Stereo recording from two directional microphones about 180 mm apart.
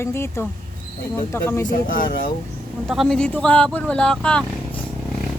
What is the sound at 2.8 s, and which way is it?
Speech, centre (ahead or behind).